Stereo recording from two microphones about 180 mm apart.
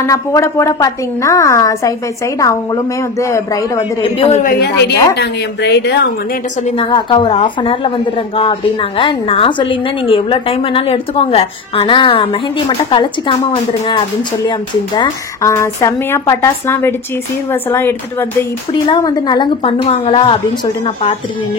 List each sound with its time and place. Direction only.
0.0 s a woman's voice: 15° left (ahead or behind)
4.0 s a woman's voice: 30° left (ahead or behind)
4.4 s a woman's voice: 55° left (ahead or behind)
4.8 s a woman's voice: 70° left (ahead or behind)
6.8 s a woman's voice: 25° left (ahead or behind)
18.7 s a woman's voice: 25° left (ahead or behind)